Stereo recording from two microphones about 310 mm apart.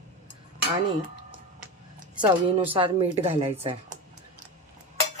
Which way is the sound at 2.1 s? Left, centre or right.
Centre.